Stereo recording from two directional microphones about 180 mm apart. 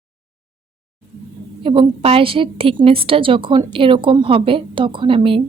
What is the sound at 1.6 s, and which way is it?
A woman's voice, 30° right (ahead or behind).